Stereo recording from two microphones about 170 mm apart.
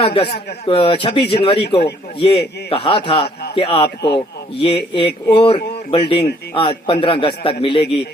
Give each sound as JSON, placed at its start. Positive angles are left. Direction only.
{"t": 0.0, "sound": "speech", "side_deg": 30}
{"t": 3.8, "sound": "speech", "side_deg": 75}
{"t": 4.5, "sound": "speech", "side_deg": 30}